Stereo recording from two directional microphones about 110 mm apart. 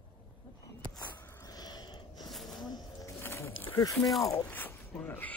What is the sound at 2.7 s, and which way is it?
Music, 35° left (ahead or behind).